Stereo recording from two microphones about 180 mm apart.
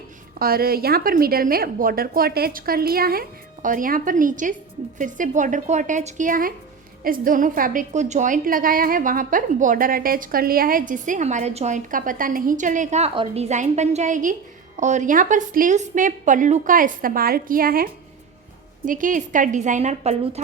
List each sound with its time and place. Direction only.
0.3 s a woman's voice: 55° right (ahead or behind); by 20.4 s 40° right (ahead or behind)